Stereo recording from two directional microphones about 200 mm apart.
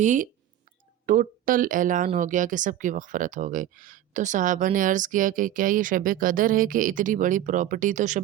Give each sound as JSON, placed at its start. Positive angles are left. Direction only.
{"t": 0.0, "sound": "speech", "side_deg": -40}